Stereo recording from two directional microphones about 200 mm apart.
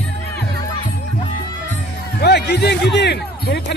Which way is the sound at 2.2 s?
55° left (ahead or behind).